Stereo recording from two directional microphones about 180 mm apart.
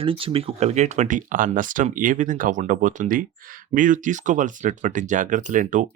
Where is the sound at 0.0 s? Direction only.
30° right (ahead or behind).